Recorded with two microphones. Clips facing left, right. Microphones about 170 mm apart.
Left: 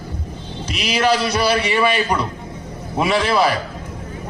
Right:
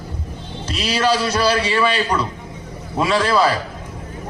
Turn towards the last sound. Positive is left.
turn(degrees=15)  # may be behind; listen again after turning